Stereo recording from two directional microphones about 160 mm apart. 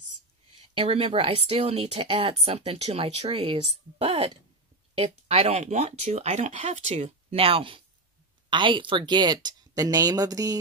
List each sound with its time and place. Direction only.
0.6 s speech: 35° right (ahead or behind)